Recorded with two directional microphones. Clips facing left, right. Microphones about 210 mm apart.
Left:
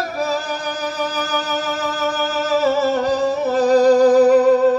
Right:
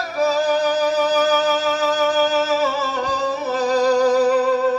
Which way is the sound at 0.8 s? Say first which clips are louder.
Right 6 dB; 50° left (ahead or behind).